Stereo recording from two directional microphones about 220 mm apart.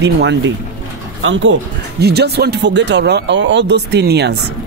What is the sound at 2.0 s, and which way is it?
Speech, 50° right (ahead or behind).